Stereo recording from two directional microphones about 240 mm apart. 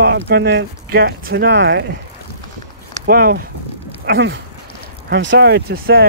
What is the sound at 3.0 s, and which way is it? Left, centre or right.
Speech, right.